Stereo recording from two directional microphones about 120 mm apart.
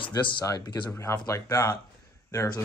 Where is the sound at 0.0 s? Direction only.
40° left (ahead or behind).